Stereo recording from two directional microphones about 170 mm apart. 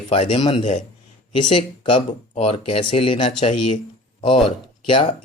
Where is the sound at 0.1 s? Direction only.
35° left (ahead or behind).